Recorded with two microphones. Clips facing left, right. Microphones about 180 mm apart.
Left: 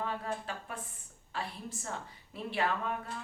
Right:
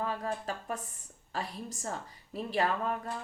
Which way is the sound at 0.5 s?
40° right (ahead or behind).